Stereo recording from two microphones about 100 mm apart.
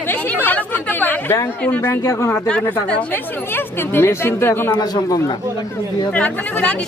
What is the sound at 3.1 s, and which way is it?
Speech, 20° left (ahead or behind).